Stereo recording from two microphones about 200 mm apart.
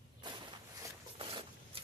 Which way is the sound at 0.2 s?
20° right (ahead or behind).